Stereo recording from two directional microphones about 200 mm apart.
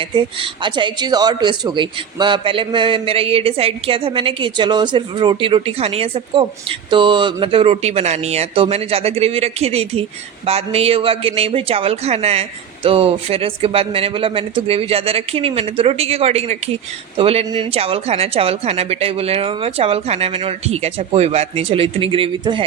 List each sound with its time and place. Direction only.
0.0 s speech: 25° right (ahead or behind)